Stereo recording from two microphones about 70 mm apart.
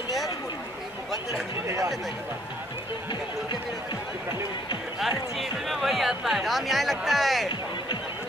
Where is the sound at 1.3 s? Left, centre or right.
Right.